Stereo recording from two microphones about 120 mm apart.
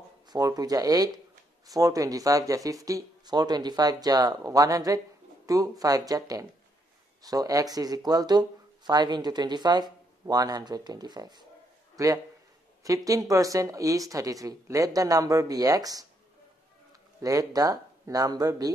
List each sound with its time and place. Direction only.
0.3 s speech: 30° right (ahead or behind)
11.9 s a sound: 30° right (ahead or behind)
12.8 s speech: 30° right (ahead or behind)
17.2 s speech: 30° right (ahead or behind)